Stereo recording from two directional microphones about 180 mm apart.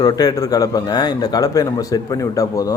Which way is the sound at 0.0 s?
20° left (ahead or behind).